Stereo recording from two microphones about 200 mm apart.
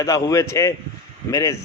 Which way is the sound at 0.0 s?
15° left (ahead or behind).